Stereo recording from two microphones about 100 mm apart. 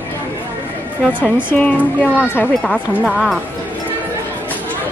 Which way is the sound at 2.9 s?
10° right (ahead or behind).